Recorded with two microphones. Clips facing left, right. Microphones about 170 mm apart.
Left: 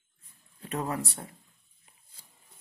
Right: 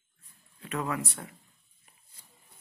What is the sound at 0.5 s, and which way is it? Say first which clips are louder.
Speech: even; 40° left (ahead or behind).